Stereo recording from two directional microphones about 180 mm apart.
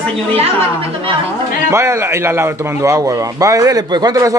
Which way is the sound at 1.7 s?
15° right (ahead or behind).